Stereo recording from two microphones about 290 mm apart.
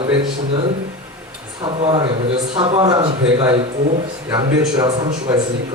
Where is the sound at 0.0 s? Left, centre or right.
Centre.